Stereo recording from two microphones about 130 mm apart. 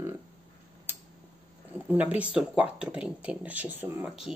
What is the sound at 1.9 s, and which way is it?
Speech, 10° right (ahead or behind).